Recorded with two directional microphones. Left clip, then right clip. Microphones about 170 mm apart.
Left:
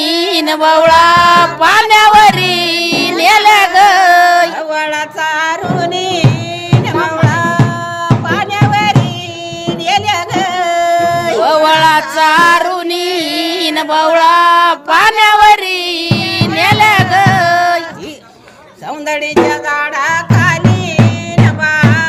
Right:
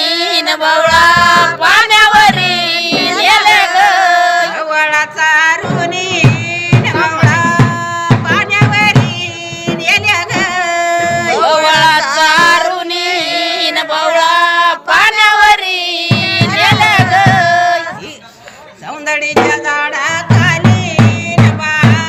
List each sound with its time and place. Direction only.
0.3 s music: 55° left (ahead or behind)
4.7 s music: 40° left (ahead or behind)
8.3 s music: 40° left (ahead or behind)
13.7 s a sound: 55° left (ahead or behind)
15.2 s music: 50° left (ahead or behind)
19.1 s music: 40° left (ahead or behind)
21.6 s music: 40° left (ahead or behind)